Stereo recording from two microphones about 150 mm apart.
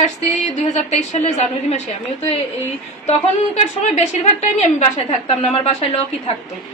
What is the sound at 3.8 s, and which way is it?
A woman's voice, 50° left (ahead or behind).